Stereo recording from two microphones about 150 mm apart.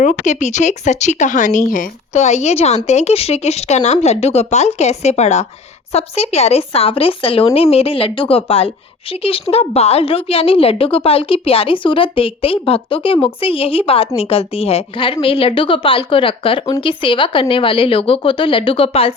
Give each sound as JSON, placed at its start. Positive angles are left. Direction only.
{"t": 0.0, "sound": "speech", "side_deg": 55}